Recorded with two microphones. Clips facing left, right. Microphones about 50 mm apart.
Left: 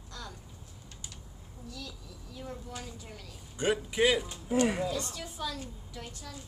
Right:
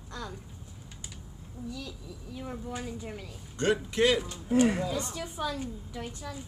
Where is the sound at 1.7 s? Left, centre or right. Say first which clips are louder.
Right 4 dB; centre.